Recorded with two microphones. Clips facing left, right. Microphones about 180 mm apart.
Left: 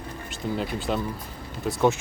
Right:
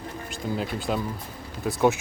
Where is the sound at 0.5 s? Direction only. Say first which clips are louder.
Even; centre (ahead or behind).